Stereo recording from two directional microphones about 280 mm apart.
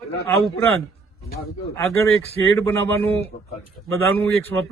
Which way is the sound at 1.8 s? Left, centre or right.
Centre.